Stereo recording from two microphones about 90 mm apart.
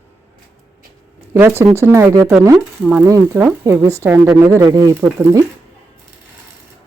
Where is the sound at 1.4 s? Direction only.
30° right (ahead or behind).